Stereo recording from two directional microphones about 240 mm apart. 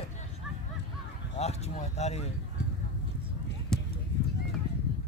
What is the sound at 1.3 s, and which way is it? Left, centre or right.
Speech, left.